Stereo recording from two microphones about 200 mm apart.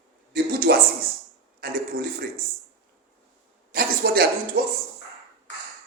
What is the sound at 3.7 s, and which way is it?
Speech, 50° right (ahead or behind).